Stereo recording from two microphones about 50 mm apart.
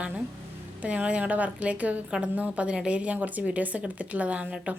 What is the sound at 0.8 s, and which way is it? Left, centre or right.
Speech, right.